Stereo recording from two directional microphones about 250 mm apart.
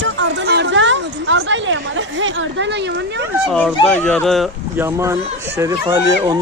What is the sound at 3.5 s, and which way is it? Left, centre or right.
Speech, centre.